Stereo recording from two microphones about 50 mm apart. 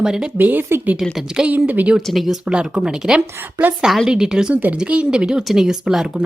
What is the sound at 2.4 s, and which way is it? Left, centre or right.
Speech, centre.